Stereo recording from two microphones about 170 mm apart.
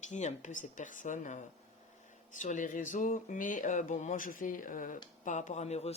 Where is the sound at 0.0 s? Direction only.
45° left (ahead or behind).